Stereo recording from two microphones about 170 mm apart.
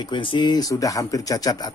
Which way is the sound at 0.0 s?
30° left (ahead or behind).